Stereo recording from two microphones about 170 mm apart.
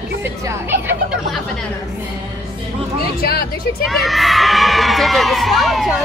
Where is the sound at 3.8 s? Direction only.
Centre (ahead or behind).